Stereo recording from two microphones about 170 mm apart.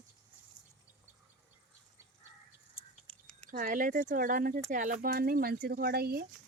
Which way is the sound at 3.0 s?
5° left (ahead or behind).